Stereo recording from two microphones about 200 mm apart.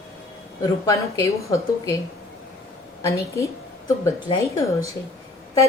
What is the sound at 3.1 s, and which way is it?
A woman's voice, 15° left (ahead or behind).